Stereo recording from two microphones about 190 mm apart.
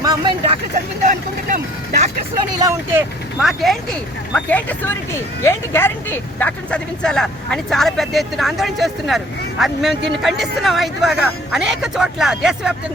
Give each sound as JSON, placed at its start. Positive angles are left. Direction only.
{"t": 0.0, "sound": "speech", "side_deg": -20}
{"t": 1.0, "sound": "vehicle", "side_deg": -45}
{"t": 2.6, "sound": "speech", "side_deg": -15}
{"t": 3.4, "sound": "speech", "side_deg": 0}